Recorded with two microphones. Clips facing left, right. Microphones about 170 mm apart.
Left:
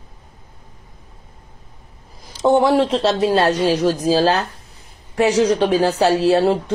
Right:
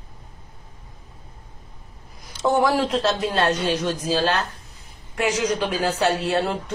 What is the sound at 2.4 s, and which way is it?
A woman's voice, 25° left (ahead or behind).